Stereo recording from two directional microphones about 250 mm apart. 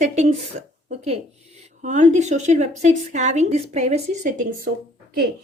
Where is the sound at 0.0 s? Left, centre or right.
Right.